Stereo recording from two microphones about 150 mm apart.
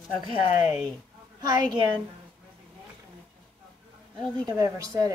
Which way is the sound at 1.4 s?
30° right (ahead or behind).